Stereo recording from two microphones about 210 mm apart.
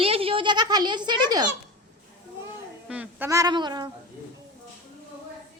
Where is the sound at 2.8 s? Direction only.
5° right (ahead or behind).